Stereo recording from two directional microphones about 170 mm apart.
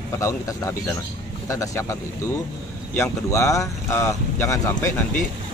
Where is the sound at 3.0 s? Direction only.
20° left (ahead or behind).